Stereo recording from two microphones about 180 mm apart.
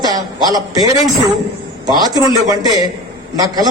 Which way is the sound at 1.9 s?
20° right (ahead or behind).